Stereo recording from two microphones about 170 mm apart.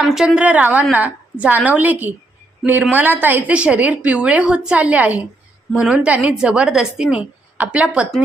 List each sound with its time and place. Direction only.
0.1 s a woman's voice: 5° right (ahead or behind)